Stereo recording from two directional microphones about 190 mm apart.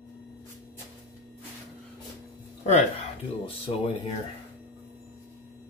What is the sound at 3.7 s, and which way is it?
Speech, 30° left (ahead or behind).